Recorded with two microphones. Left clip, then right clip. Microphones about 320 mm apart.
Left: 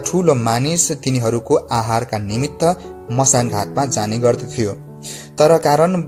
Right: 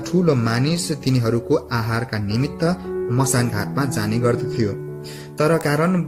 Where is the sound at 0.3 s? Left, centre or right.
Centre.